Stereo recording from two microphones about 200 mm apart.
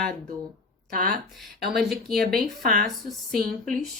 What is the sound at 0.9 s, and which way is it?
Speech, 45° right (ahead or behind).